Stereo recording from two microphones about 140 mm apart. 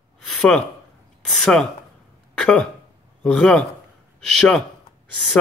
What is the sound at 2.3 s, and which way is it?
A man's voice, 5° left (ahead or behind).